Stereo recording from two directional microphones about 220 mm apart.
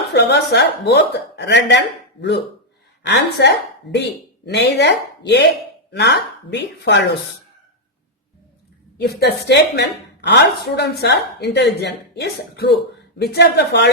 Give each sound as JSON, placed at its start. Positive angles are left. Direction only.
{"t": 0.1, "sound": "a woman's voice", "side_deg": 50}
{"t": 3.1, "sound": "a woman's voice", "side_deg": 50}
{"t": 9.0, "sound": "a woman's voice", "side_deg": 50}